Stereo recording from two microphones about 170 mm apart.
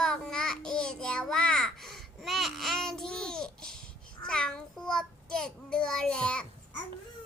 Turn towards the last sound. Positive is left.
turn(degrees=5)  # may be behind; listen again after turning